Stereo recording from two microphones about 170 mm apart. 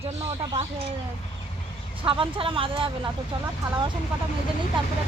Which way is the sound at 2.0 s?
30° right (ahead or behind).